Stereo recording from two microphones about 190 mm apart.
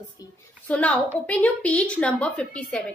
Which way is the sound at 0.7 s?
5° left (ahead or behind).